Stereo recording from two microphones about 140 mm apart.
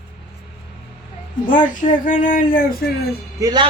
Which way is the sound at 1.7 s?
70° left (ahead or behind).